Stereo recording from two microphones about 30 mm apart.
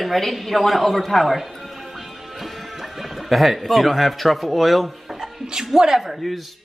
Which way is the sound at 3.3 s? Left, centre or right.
Centre.